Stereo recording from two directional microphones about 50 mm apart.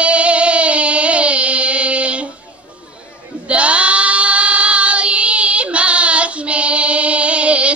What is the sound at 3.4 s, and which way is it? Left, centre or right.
Child singing, right.